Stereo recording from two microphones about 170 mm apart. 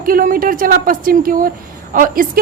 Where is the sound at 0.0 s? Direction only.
55° right (ahead or behind).